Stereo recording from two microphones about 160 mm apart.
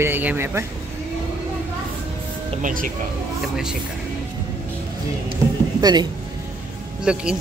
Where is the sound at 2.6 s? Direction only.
55° right (ahead or behind).